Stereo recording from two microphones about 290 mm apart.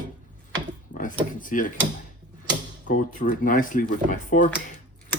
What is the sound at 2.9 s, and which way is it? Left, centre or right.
Speech, left.